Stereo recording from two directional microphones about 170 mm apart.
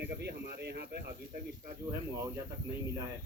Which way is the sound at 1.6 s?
20° right (ahead or behind).